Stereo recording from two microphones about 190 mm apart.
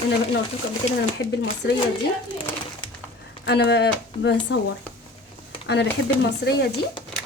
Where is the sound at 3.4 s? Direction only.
65° left (ahead or behind).